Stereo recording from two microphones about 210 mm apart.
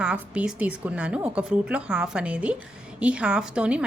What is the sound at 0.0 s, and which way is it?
A woman's voice, 5° right (ahead or behind).